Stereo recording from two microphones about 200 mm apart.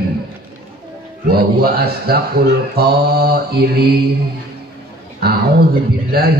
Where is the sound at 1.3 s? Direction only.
50° right (ahead or behind).